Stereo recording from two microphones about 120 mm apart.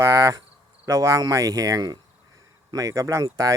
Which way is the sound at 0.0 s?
25° right (ahead or behind).